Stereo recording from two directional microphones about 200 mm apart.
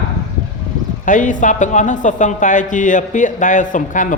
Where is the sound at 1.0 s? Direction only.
40° left (ahead or behind).